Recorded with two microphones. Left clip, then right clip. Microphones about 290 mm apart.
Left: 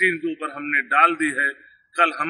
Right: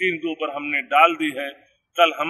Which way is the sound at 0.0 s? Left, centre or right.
Centre.